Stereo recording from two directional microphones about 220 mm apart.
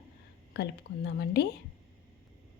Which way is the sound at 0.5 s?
50° left (ahead or behind).